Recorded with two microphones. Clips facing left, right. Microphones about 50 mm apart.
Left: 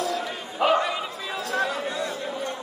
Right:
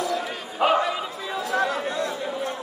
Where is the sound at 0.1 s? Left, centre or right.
Centre.